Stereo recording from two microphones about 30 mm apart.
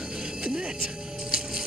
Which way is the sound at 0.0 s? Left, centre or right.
Right.